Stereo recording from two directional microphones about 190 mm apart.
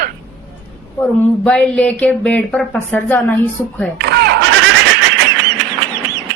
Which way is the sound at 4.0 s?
60° right (ahead or behind).